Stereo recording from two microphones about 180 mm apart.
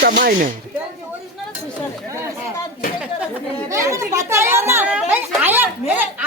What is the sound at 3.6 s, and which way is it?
A woman's voice, 15° right (ahead or behind).